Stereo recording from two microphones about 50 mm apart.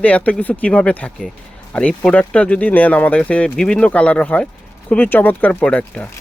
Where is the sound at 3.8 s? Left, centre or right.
Left.